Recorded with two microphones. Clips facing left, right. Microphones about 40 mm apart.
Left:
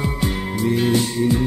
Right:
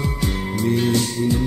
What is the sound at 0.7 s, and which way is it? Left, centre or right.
Music, centre.